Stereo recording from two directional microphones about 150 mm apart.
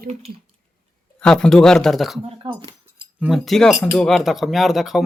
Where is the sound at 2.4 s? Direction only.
30° right (ahead or behind).